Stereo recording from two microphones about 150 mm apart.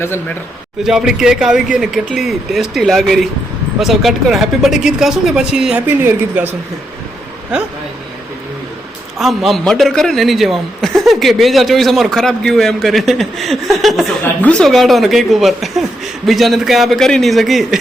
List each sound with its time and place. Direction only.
0.0 s a man's voice: 15° left (ahead or behind)
0.9 s a man's voice: 5° right (ahead or behind)
7.5 s a man's voice: 5° right (ahead or behind)
9.1 s a man's voice: centre (ahead or behind)